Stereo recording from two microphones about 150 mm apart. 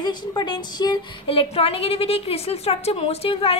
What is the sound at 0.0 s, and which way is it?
Speech, 30° left (ahead or behind).